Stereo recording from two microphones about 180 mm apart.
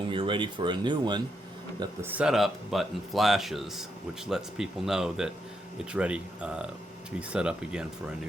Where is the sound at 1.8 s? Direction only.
10° right (ahead or behind).